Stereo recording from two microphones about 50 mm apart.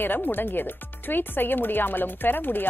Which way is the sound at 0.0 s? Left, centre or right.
Left.